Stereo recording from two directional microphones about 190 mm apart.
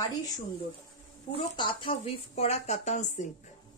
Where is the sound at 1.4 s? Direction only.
30° left (ahead or behind).